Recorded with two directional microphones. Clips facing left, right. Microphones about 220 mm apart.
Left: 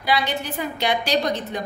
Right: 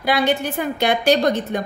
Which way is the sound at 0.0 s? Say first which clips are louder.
Right 5 dB; 50° right (ahead or behind).